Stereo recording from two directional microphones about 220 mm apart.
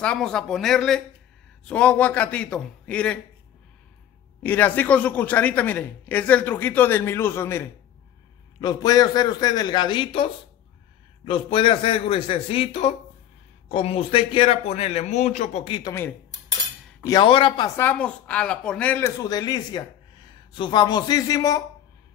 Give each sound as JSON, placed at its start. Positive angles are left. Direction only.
{"t": 0.0, "sound": "a man's voice", "side_deg": 5}
{"t": 4.4, "sound": "speech", "side_deg": 10}
{"t": 11.2, "sound": "speech", "side_deg": 25}
{"t": 15.9, "sound": "speech", "side_deg": 10}
{"t": 17.0, "sound": "speech", "side_deg": 20}
{"t": 17.7, "sound": "speech", "side_deg": 5}